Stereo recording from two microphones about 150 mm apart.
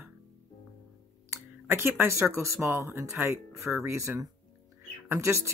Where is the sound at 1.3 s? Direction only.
15° right (ahead or behind).